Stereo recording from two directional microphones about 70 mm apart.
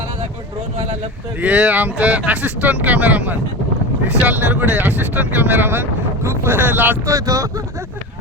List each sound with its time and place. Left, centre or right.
1.4 s speech: centre
7.1 s speech: right